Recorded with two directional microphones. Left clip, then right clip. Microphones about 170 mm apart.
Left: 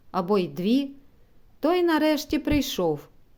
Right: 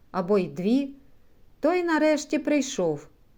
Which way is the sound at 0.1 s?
25° left (ahead or behind).